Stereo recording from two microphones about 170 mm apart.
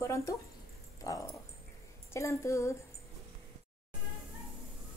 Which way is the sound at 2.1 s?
15° left (ahead or behind).